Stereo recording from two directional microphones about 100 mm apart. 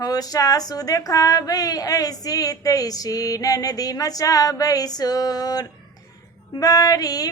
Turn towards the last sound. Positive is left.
turn(degrees=35)  # may be behind; listen again after turning